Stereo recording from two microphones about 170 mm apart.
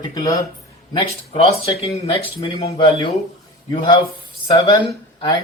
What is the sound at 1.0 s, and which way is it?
A man's voice, 30° left (ahead or behind).